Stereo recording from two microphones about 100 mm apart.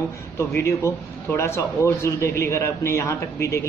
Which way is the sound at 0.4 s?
30° left (ahead or behind).